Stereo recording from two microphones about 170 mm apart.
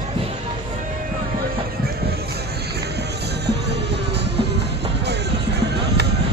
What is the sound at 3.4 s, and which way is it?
Music, 80° right.